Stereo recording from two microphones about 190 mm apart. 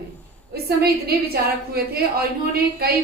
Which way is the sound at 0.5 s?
55° right (ahead or behind).